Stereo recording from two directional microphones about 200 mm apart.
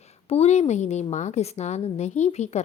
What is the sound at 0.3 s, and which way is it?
A woman's voice, 30° left (ahead or behind).